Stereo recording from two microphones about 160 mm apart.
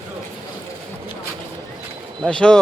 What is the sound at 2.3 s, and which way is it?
Speech, 5° left (ahead or behind).